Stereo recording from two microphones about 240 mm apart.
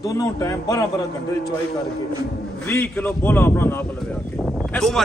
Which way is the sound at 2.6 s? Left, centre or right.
Centre.